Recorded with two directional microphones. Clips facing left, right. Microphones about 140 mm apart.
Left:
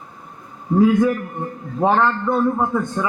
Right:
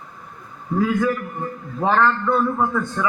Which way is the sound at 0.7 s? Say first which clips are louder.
Left 5 dB; 20° left (ahead or behind).